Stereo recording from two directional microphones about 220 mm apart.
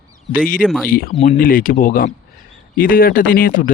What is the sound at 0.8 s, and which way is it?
Speech, 40° left (ahead or behind).